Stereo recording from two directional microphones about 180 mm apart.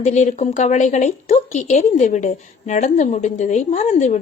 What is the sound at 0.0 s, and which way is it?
Speech, 40° left (ahead or behind).